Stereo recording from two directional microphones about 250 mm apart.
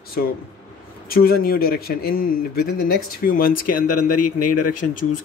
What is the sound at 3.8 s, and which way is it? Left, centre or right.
A man's voice, left.